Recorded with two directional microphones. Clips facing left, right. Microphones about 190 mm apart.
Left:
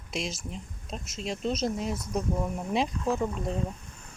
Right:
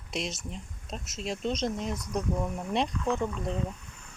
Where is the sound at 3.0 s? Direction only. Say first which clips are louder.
Left 1 dB; 35° left (ahead or behind).